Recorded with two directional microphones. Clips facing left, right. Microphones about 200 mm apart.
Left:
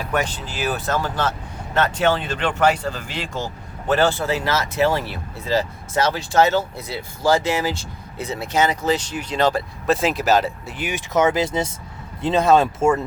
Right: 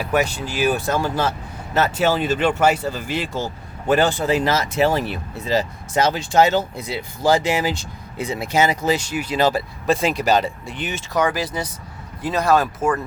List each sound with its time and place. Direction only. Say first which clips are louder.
0.0 s speech: right 3 dB; 10° right (ahead or behind); by 11.0 s 10° left (ahead or behind)
11.1 s speech: left 3 dB; 25° left (ahead or behind)